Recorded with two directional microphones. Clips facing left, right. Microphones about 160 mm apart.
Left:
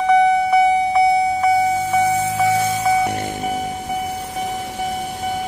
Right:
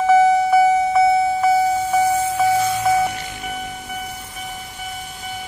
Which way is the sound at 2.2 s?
80° left.